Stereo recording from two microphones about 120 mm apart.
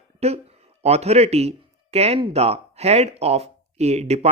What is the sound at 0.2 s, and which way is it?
Speech, 60° right (ahead or behind).